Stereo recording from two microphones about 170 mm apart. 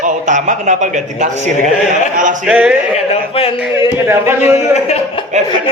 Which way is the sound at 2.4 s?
5° right (ahead or behind).